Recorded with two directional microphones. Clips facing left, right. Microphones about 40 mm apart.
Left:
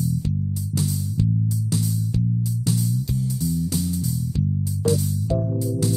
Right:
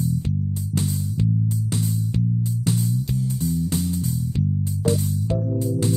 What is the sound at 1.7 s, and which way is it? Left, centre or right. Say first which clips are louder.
Music: even; right.